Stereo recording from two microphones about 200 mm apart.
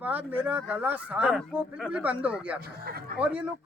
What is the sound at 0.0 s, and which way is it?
Speech, 10° right (ahead or behind).